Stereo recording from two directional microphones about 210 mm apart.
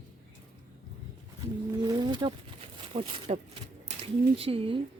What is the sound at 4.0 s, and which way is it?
Speech, 25° right (ahead or behind).